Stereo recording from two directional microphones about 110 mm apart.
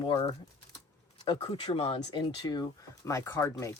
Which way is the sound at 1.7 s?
65° left (ahead or behind).